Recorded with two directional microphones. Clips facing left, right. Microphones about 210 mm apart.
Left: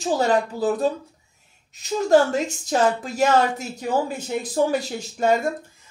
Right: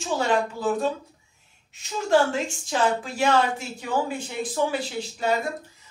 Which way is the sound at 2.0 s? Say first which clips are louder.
Left 3 dB; 40° left (ahead or behind).